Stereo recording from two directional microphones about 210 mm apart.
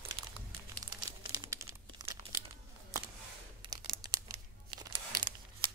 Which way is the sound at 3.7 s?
20° right (ahead or behind).